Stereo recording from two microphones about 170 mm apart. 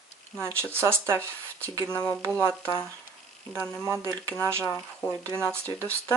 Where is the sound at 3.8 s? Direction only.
15° right (ahead or behind).